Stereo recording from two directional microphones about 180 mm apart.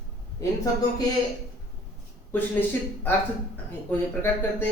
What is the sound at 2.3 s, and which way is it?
A man's voice, 10° left (ahead or behind).